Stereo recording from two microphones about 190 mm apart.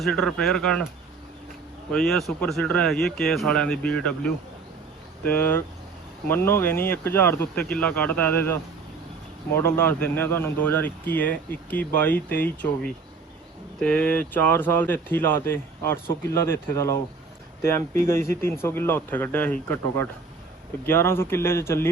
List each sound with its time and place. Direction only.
0.0 s speech: 5° left (ahead or behind)
1.9 s speech: centre (ahead or behind)
5.3 s speech: 10° left (ahead or behind)
9.6 s speech: 10° left (ahead or behind)